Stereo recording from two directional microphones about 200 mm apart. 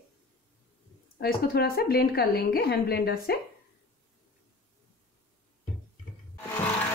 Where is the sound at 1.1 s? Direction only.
50° left (ahead or behind).